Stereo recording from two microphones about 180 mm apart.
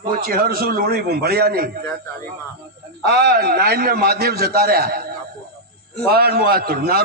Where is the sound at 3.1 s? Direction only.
60° right (ahead or behind).